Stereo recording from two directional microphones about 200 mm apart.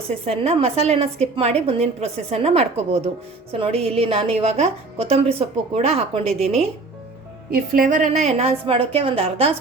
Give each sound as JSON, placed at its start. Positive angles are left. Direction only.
{"t": 0.3, "sound": "a woman's voice", "side_deg": -30}
{"t": 7.5, "sound": "a woman's voice", "side_deg": -45}